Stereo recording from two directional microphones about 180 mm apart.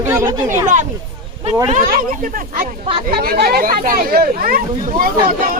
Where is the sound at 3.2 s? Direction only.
60° right (ahead or behind).